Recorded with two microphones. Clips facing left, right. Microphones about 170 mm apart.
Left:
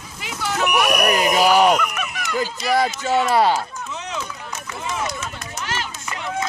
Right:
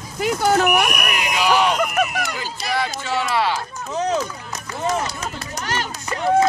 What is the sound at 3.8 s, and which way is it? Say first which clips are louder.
Run: right 8 dB; 40° right (ahead or behind).